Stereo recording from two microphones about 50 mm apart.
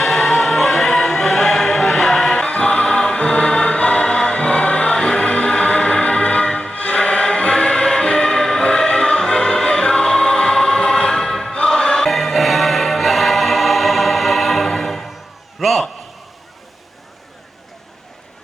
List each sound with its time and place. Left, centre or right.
0.0 s music: centre
2.3 s music: centre
15.6 s a sound: centre